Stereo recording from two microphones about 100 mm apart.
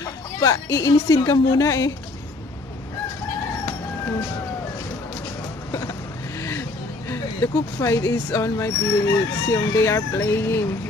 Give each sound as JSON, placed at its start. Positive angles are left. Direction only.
{"t": 0.0, "sound": "a woman's voice", "side_deg": 35}
{"t": 5.7, "sound": "a sound", "side_deg": 30}
{"t": 6.4, "sound": "speech", "side_deg": 25}